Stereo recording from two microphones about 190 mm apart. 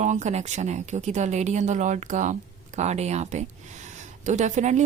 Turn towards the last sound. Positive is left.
turn(degrees=-40)  # may be behind; listen again after turning